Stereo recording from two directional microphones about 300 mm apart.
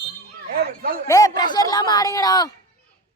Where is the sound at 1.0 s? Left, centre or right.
Centre.